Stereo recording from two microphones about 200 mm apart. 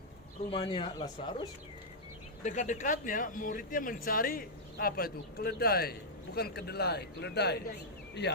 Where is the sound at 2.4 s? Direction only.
40° left (ahead or behind).